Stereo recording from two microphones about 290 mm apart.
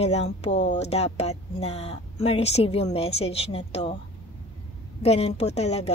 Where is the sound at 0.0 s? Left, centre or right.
Left.